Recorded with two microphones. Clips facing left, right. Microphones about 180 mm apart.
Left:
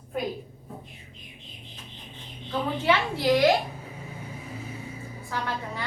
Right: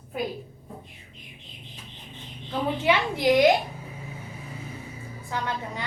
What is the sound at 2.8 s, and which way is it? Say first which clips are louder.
Speech: right 1 dB; 15° right (ahead or behind).